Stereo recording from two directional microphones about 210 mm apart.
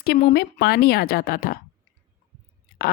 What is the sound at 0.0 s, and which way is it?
Speech, 50° left (ahead or behind).